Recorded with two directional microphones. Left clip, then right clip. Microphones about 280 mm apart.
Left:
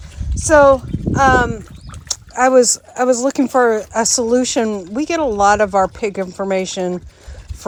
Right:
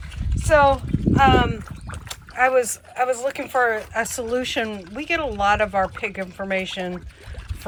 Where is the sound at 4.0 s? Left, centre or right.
Centre.